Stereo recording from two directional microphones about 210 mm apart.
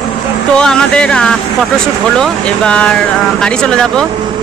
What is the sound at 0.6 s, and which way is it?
Speech, 5° left (ahead or behind).